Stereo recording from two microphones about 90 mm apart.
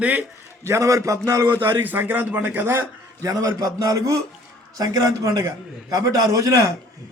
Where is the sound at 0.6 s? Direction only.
35° right (ahead or behind).